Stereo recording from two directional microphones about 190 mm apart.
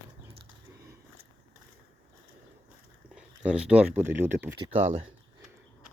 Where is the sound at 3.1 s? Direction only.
5° right (ahead or behind).